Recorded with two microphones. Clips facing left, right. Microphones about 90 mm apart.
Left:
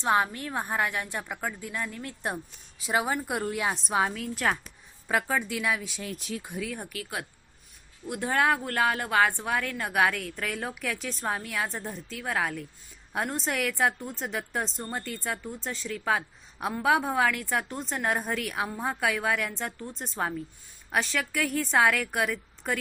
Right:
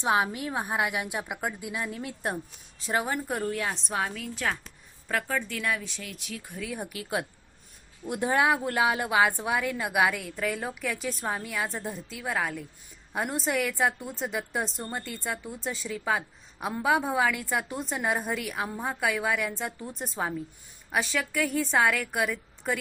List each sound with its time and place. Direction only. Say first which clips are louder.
0.0 s a woman's voice: even; 5° right (ahead or behind)
2.2 s a woman's voice: even; 5° left (ahead or behind)
6.0 s speech: left 4 dB; 35° left (ahead or behind)
6.7 s a woman's voice: right 4 dB; 20° right (ahead or behind); by 22.8 s centre (ahead or behind)